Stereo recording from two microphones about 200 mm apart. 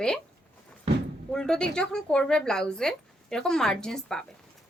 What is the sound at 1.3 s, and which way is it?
Speech, 5° left (ahead or behind).